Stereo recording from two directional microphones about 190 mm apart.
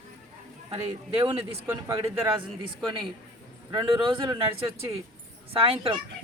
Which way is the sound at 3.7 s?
25° right (ahead or behind).